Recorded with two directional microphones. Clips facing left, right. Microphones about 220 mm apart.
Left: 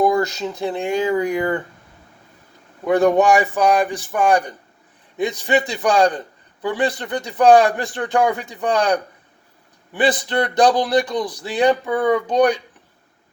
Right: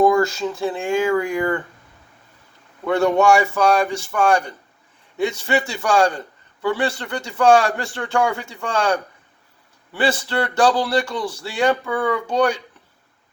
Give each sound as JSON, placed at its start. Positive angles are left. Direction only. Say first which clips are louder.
{"t": 0.0, "sound": "speech", "louder": "right 2 dB", "side_deg": 20}
{"t": 2.8, "sound": "a man's voice", "louder": "left 2 dB", "side_deg": 15}